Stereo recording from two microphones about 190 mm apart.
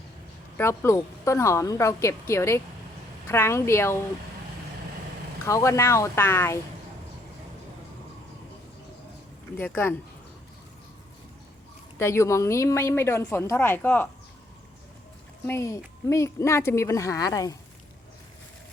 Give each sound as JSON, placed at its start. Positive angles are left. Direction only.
{"t": 0.5, "sound": "a woman's voice", "side_deg": 15}
{"t": 5.5, "sound": "a woman's voice", "side_deg": 15}
{"t": 9.6, "sound": "a woman's voice", "side_deg": 10}
{"t": 11.9, "sound": "a woman's voice", "side_deg": 15}
{"t": 15.4, "sound": "a woman's voice", "side_deg": 15}